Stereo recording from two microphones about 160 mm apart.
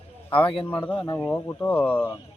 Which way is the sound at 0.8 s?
10° left (ahead or behind).